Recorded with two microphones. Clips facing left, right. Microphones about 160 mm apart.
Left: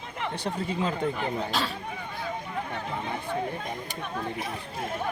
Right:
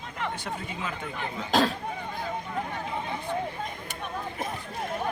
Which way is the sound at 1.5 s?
45° right (ahead or behind).